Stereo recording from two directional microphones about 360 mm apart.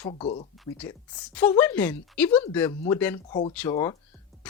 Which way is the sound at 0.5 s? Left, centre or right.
Centre.